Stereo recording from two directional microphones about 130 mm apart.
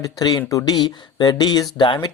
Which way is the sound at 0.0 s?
30° left (ahead or behind).